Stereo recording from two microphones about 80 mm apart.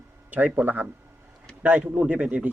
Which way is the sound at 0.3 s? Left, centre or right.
Right.